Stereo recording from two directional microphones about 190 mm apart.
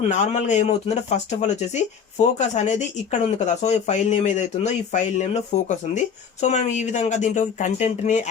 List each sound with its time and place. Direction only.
0.1 s speech: 40° left (ahead or behind)